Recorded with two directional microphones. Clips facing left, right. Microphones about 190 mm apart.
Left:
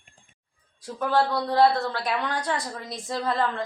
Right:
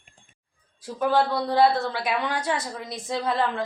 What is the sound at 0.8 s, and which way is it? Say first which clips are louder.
A woman's voice: right 1 dB; 5° right (ahead or behind).